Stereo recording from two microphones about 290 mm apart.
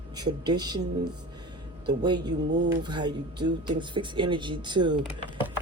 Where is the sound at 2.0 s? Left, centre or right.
Centre.